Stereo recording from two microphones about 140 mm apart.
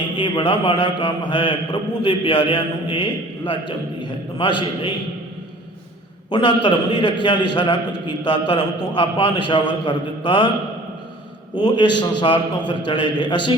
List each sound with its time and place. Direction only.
0.2 s a man's voice: 35° left (ahead or behind)
6.3 s a man's voice: 35° left (ahead or behind)
11.5 s a man's voice: 30° left (ahead or behind)